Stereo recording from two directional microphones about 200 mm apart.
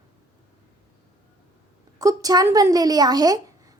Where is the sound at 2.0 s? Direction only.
15° right (ahead or behind).